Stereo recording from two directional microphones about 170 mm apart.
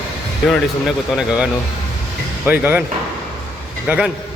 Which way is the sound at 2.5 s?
10° right (ahead or behind).